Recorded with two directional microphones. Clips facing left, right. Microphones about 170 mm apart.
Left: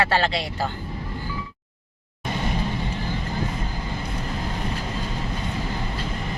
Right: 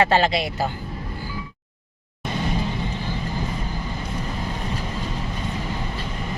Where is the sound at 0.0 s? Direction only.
15° right (ahead or behind).